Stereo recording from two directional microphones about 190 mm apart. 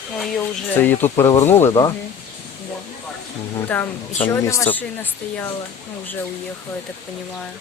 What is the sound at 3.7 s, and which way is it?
Speech, 10° left (ahead or behind).